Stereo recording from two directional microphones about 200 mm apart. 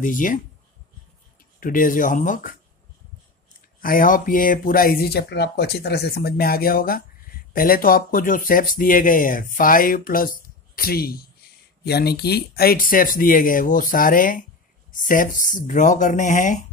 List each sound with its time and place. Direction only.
0.0 s speech: 40° left (ahead or behind)
1.6 s speech: 45° left (ahead or behind)
3.8 s speech: 45° left (ahead or behind)